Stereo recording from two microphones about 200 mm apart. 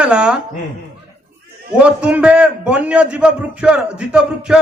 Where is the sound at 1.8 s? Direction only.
5° right (ahead or behind).